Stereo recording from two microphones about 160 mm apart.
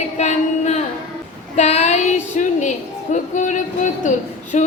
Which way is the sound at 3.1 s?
50° left (ahead or behind).